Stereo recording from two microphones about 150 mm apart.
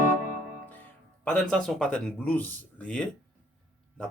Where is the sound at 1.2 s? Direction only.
5° left (ahead or behind).